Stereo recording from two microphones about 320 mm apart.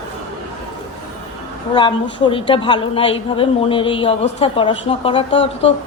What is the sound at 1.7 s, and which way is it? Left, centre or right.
A woman's voice, centre.